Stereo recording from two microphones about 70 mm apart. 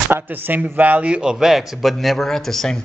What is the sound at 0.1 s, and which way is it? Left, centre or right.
A man's voice, right.